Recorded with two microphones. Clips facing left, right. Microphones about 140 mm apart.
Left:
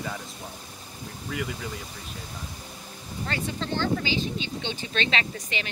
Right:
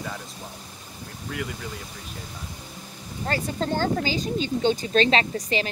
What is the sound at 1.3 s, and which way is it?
Speech, centre (ahead or behind).